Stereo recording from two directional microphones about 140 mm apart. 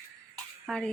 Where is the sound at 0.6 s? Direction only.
5° left (ahead or behind).